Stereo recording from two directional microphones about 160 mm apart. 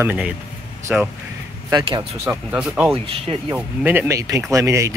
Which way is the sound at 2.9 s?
35° right (ahead or behind).